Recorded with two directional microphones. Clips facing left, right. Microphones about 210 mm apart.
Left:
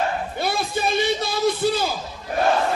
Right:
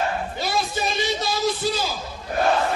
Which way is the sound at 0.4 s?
55° left (ahead or behind).